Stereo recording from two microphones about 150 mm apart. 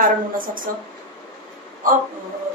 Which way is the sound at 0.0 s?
65° right (ahead or behind).